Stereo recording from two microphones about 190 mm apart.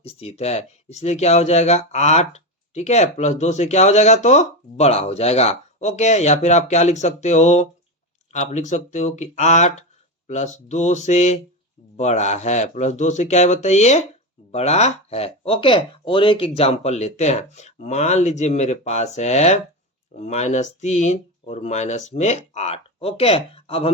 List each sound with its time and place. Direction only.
0.0 s speech: 30° left (ahead or behind)